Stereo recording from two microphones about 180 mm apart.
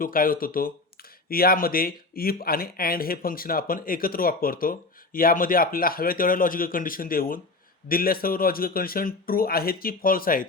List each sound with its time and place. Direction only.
0.0 s speech: 50° left (ahead or behind)